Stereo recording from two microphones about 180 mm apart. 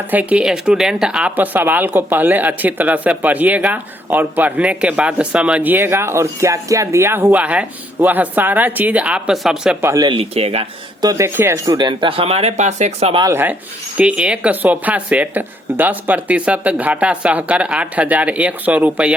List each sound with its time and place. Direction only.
0.1 s speech: 10° right (ahead or behind)
9.8 s speech: 20° right (ahead or behind)
11.0 s speech: 15° right (ahead or behind); by 13.2 s 35° right (ahead or behind)
13.2 s speech: 10° right (ahead or behind)